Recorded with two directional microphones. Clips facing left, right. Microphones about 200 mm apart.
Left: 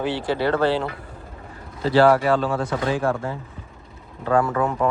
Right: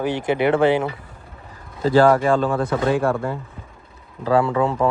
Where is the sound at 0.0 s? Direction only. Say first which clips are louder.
Right 3 dB; 15° right (ahead or behind).